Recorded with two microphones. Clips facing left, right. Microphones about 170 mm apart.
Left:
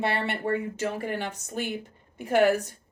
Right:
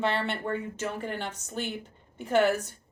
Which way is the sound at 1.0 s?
10° left (ahead or behind).